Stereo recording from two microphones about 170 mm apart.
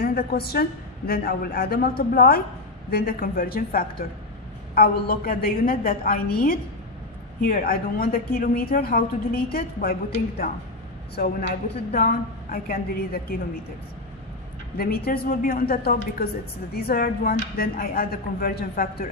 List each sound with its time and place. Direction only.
0.0 s a woman's voice: 60° left (ahead or behind)
14.8 s a woman's voice: 65° left (ahead or behind)